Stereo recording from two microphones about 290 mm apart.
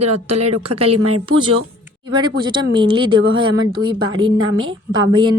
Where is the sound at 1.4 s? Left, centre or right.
Centre.